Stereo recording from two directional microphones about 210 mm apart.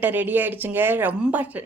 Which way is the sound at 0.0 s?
10° right (ahead or behind).